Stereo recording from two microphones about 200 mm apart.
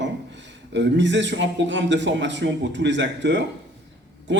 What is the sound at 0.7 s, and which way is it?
A man's voice, 65° right (ahead or behind).